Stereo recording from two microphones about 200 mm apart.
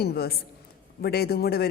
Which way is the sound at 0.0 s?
50° left (ahead or behind).